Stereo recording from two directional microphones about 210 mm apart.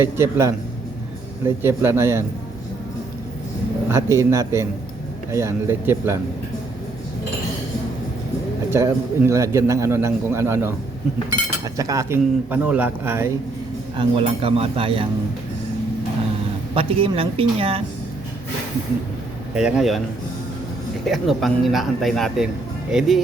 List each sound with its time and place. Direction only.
0.0 s a man's voice: 10° right (ahead or behind)
3.8 s a man's voice: 15° right (ahead or behind)
8.7 s a man's voice: 10° right (ahead or behind)
13.9 s speech: 25° right (ahead or behind)
16.7 s speech: 25° right (ahead or behind)
19.5 s speech: 5° right (ahead or behind)
21.0 s speech: centre (ahead or behind)